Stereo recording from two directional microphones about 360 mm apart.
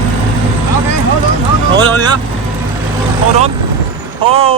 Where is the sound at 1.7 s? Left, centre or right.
Centre.